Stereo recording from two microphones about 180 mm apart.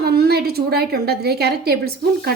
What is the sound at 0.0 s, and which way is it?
A woman's voice, 60° right (ahead or behind).